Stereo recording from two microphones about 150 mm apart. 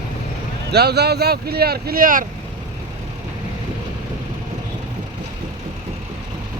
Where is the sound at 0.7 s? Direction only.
90° right; by 2.3 s 65° right (ahead or behind).